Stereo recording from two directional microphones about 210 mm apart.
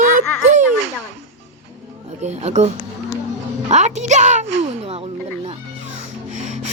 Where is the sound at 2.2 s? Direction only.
35° right (ahead or behind).